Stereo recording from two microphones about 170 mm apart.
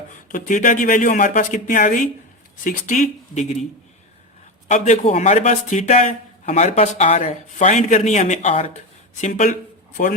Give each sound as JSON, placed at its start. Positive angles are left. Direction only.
{"t": 0.1, "sound": "a man's voice", "side_deg": 50}
{"t": 4.7, "sound": "a man's voice", "side_deg": 45}